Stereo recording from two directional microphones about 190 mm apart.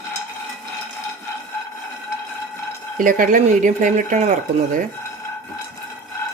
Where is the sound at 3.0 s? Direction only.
45° right (ahead or behind).